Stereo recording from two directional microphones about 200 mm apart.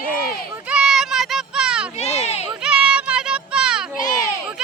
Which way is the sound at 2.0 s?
30° left (ahead or behind).